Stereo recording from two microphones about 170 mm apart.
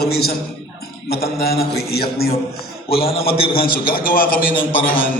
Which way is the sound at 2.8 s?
35° left (ahead or behind).